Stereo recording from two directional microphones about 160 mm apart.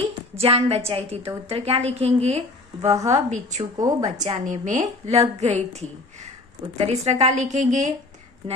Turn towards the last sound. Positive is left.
turn(degrees=-50)  # may be behind; listen again after turning